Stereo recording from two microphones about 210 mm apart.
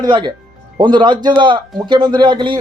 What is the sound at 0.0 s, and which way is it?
Speech, 20° right (ahead or behind).